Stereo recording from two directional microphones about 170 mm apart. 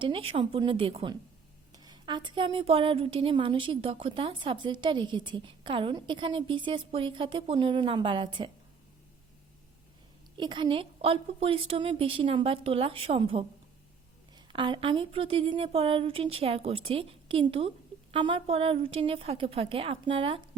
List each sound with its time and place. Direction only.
0.0 s a woman's voice: 30° right (ahead or behind)
10.3 s a woman's voice: 25° right (ahead or behind)